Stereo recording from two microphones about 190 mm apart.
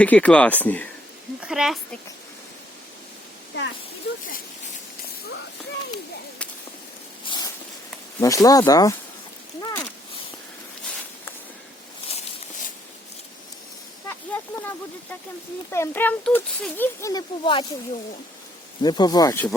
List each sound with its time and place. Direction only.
0.0 s speech: 5° left (ahead or behind)
1.4 s speech: 5° right (ahead or behind)
7.3 s a sound: 20° left (ahead or behind)
8.2 s speech: 20° left (ahead or behind)
9.6 s a sound: 20° left (ahead or behind)
14.1 s speech: 10° left (ahead or behind)
18.8 s speech: 20° left (ahead or behind)